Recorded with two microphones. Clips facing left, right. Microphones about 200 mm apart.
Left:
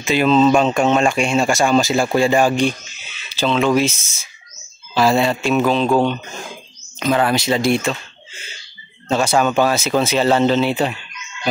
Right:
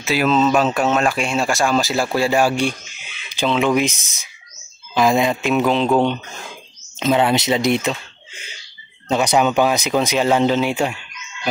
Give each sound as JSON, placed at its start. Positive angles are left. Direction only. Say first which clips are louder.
{"t": 0.0, "sound": "speech", "louder": "left 3 dB", "side_deg": -5}
{"t": 7.0, "sound": "speech", "louder": "right 1 dB", "side_deg": -20}
{"t": 9.1, "sound": "speech", "louder": "even", "side_deg": -15}